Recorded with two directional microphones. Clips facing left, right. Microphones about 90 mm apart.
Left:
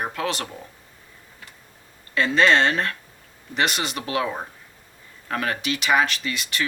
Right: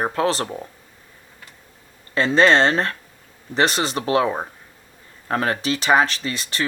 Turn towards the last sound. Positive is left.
turn(degrees=-35)  # may be behind; listen again after turning